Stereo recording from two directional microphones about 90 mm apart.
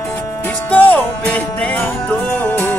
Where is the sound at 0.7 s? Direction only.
15° left (ahead or behind).